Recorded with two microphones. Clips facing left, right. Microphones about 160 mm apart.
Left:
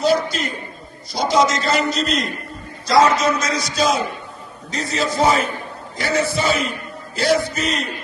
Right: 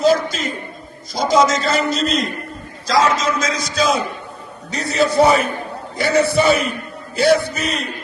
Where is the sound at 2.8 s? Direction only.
90° right.